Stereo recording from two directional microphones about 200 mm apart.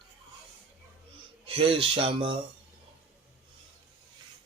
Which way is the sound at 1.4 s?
25° right (ahead or behind).